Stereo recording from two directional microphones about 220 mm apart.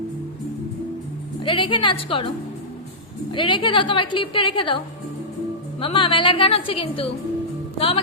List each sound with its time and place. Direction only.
1.4 s a woman's voice: 20° left (ahead or behind)
3.3 s a woman's voice: 20° left (ahead or behind)
5.8 s a woman's voice: 25° left (ahead or behind)